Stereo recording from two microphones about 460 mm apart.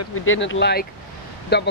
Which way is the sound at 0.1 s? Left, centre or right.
Left.